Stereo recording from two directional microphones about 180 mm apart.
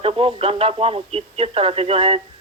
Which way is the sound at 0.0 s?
30° right (ahead or behind).